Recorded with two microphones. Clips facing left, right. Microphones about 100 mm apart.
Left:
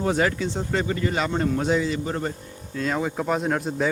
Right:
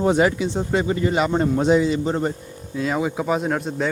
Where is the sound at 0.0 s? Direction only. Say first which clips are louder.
Right 5 dB; 20° right (ahead or behind).